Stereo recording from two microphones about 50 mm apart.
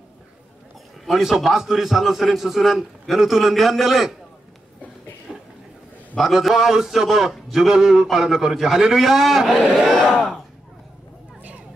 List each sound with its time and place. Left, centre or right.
1.0 s a man's voice: centre
5.3 s a sound: right
6.1 s a man's voice: centre